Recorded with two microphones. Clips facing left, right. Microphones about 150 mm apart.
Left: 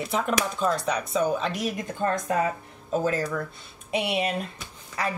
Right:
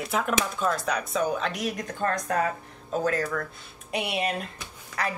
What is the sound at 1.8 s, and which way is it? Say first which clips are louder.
Speech: left 2 dB; 25° left (ahead or behind).